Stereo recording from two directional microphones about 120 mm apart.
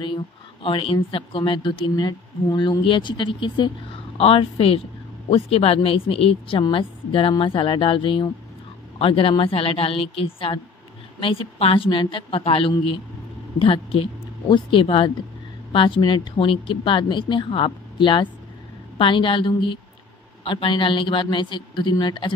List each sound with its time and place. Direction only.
0.0 s a woman's voice: 45° left (ahead or behind)
4.2 s a woman's voice: 55° left (ahead or behind)